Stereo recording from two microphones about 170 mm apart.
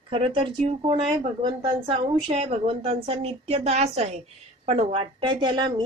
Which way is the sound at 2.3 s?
35° right (ahead or behind).